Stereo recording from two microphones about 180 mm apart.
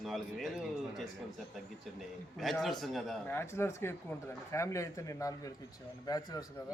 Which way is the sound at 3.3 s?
15° left (ahead or behind).